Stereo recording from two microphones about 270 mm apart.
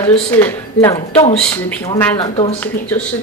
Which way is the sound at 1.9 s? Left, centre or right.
Left.